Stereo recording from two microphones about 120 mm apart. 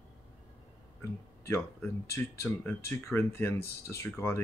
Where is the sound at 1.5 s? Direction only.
20° left (ahead or behind).